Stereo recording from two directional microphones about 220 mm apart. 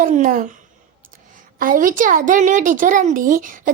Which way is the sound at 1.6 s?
40° right (ahead or behind).